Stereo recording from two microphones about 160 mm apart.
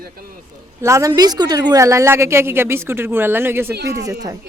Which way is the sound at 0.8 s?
20° right (ahead or behind).